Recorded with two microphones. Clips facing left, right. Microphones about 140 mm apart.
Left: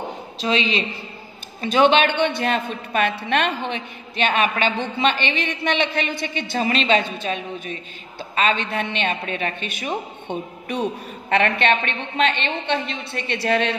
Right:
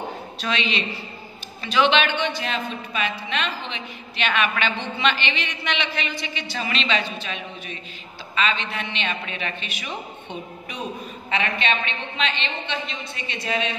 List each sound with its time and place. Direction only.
0.4 s a man's voice: 30° left (ahead or behind); by 13.7 s 65° left (ahead or behind)